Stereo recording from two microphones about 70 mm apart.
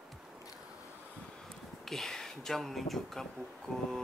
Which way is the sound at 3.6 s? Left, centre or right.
Centre.